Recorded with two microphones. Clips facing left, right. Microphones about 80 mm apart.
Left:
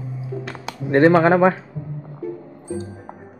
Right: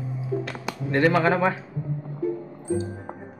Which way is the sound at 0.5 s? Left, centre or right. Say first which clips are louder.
Left 10 dB; left.